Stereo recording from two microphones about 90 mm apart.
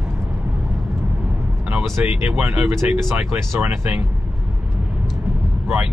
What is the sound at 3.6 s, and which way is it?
Speech, 25° right (ahead or behind).